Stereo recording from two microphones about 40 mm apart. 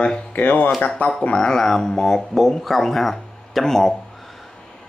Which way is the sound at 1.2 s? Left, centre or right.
Left.